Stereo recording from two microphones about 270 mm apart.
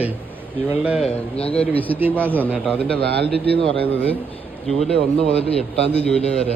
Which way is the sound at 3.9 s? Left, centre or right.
Centre.